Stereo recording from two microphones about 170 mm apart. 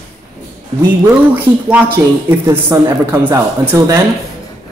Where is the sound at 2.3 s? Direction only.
15° right (ahead or behind).